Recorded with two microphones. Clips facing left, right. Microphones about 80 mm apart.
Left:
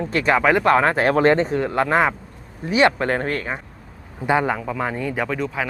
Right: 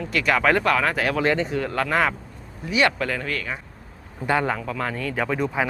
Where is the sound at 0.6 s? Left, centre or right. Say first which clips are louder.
Left 5 dB; left.